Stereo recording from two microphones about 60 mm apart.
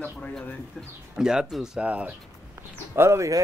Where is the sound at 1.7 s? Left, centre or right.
Right.